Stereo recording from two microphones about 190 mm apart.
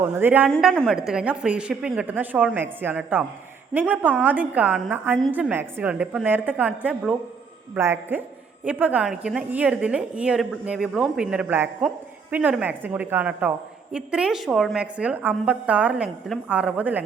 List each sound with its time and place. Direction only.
0.0 s a woman's voice: 10° right (ahead or behind)
0.5 s a woman's voice: 5° left (ahead or behind)